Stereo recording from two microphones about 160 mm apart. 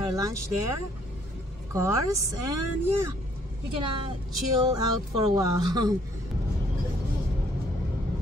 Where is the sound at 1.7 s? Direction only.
20° right (ahead or behind).